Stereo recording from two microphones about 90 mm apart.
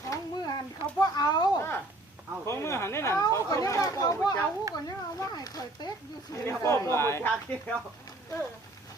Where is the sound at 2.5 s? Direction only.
30° left (ahead or behind).